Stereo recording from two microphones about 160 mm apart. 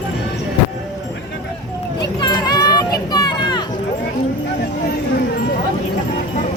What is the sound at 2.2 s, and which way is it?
Music, 25° left (ahead or behind).